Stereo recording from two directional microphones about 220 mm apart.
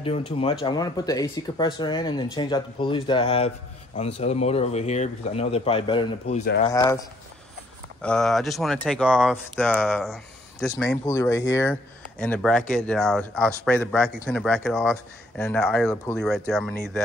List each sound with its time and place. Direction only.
0.0 s speech: 25° left (ahead or behind)
6.6 s speech: 15° left (ahead or behind)
8.0 s speech: 5° left (ahead or behind)